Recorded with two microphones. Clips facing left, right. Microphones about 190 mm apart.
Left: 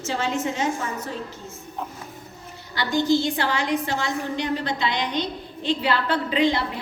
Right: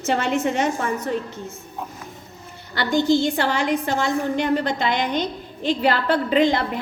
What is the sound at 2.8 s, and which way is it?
A woman's voice, 55° right (ahead or behind).